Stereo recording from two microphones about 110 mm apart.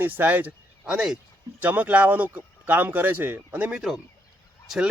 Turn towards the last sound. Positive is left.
turn(degrees=-5)  # may be behind; listen again after turning